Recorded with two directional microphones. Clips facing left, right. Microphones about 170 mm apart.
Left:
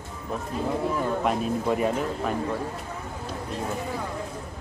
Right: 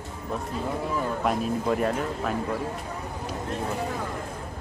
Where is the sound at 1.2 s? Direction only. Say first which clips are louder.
Left 1 dB; centre (ahead or behind).